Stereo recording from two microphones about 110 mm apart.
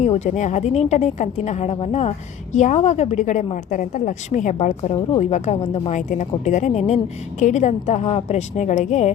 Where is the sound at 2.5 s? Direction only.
90° left.